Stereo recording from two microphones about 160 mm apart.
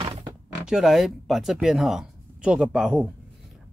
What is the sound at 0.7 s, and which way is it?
Speech, 5° right (ahead or behind).